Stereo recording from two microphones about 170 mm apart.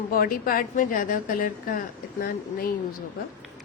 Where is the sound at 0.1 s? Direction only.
60° left (ahead or behind).